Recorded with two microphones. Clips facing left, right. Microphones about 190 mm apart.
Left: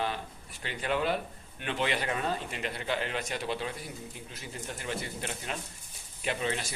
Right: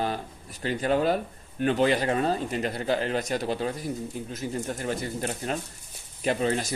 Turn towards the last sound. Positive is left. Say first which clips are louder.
# right 7 dB
turn(degrees=-40)  # may be behind; listen again after turning